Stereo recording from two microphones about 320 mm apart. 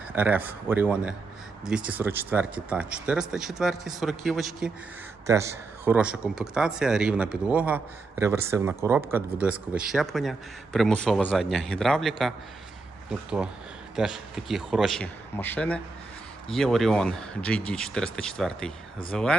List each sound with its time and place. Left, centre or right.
0.1 s speech: centre